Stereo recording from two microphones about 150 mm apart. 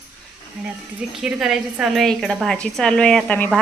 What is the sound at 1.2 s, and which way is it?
A woman's voice, 5° right (ahead or behind).